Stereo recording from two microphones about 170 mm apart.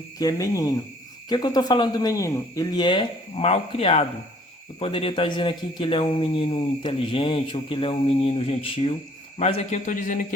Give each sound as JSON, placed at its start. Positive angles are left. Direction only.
{"t": 0.2, "sound": "a man's voice", "side_deg": 20}